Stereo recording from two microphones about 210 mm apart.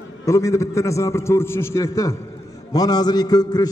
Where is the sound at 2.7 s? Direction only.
20° left (ahead or behind).